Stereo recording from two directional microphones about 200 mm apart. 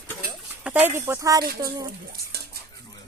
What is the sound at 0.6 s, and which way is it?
Speech, 5° right (ahead or behind).